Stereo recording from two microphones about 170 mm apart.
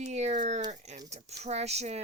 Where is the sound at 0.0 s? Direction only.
40° right (ahead or behind).